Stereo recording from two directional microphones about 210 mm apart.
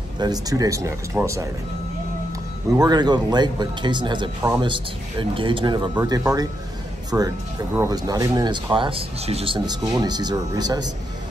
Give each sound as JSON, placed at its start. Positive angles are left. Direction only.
{"t": 0.2, "sound": "speech", "side_deg": -15}
{"t": 2.8, "sound": "speech", "side_deg": -20}